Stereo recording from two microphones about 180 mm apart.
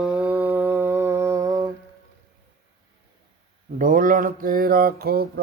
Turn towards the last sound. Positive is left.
turn(degrees=-60)  # may be behind; listen again after turning